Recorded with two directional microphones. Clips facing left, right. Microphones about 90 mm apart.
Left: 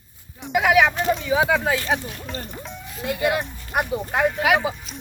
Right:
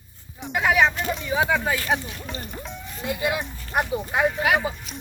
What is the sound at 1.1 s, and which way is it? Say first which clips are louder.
Speech: left 3 dB; centre (ahead or behind).